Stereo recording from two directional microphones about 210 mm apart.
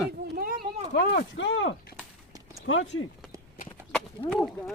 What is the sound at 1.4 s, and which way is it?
Speech, 65° left (ahead or behind).